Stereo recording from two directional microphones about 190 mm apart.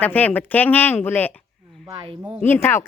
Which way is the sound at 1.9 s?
25° right (ahead or behind).